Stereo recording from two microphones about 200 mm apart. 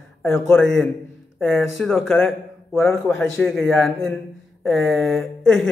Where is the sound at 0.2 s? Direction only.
10° left (ahead or behind).